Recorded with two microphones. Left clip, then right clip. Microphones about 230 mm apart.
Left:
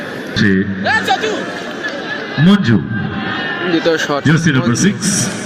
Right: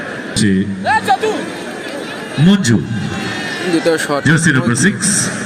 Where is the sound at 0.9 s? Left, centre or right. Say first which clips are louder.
Right 1 dB; right.